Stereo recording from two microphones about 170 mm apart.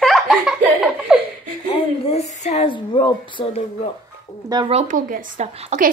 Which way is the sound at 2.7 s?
30° left (ahead or behind).